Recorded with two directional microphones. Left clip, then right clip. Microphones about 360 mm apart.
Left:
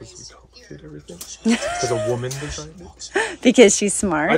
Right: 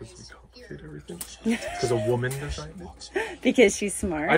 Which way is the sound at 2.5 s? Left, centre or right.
Centre.